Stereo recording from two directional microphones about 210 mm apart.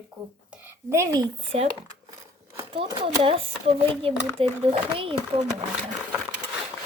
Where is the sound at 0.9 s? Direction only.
15° right (ahead or behind).